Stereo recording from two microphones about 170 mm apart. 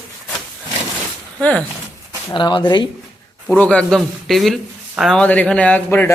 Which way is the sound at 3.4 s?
10° left (ahead or behind).